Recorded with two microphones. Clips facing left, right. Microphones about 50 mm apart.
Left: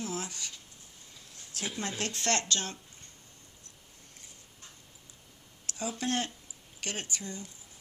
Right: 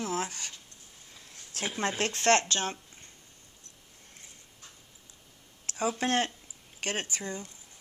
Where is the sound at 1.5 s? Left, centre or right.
Right.